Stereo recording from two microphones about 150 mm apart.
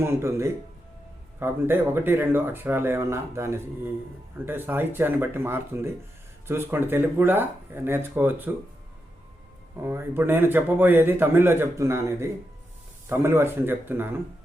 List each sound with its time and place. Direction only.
0.0 s speech: 15° right (ahead or behind)
9.8 s speech: 15° right (ahead or behind)